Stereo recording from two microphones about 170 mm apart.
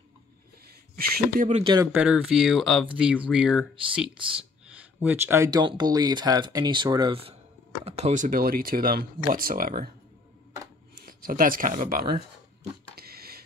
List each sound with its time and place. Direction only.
0.9 s speech: 60° right (ahead or behind)
1.5 s speech: 30° right (ahead or behind)
1.9 s speech: 10° right (ahead or behind); by 9.8 s 55° right (ahead or behind)
11.0 s speech: 60° right (ahead or behind)
12.9 s a sound: 65° right (ahead or behind)